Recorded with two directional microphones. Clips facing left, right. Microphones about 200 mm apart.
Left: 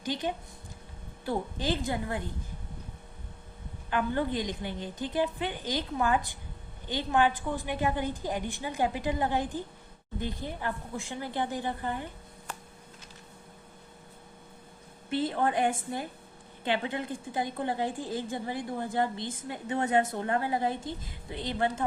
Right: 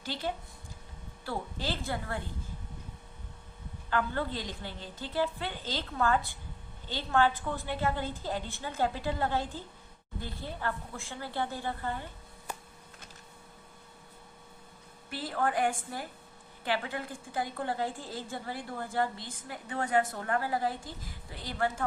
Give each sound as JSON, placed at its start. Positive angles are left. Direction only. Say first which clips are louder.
{"t": 0.0, "sound": "a woman's voice", "louder": "left 3 dB", "side_deg": 15}
{"t": 3.8, "sound": "a woman's voice", "louder": "left 3 dB", "side_deg": 15}
{"t": 15.1, "sound": "a woman's voice", "louder": "left 4 dB", "side_deg": 20}